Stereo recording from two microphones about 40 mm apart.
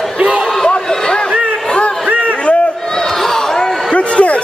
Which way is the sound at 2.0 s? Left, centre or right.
Right.